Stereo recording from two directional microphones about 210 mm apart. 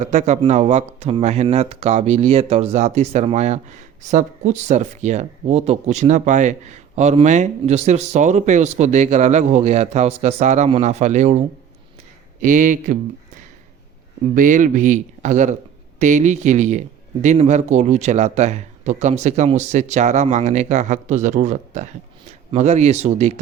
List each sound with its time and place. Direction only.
0.0 s speech: 35° right (ahead or behind)
14.3 s speech: 40° right (ahead or behind)